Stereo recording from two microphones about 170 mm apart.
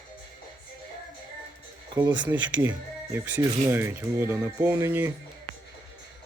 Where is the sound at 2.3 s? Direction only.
15° right (ahead or behind).